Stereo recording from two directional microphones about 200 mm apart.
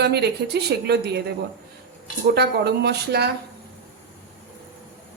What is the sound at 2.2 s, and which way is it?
Speech, 55° right (ahead or behind).